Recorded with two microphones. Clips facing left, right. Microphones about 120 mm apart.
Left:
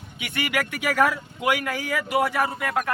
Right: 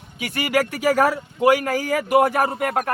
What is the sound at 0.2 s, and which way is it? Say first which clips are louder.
Speech: right 6 dB; 40° right (ahead or behind).